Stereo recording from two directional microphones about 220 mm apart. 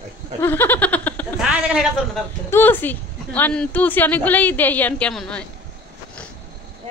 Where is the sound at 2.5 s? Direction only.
10° left (ahead or behind).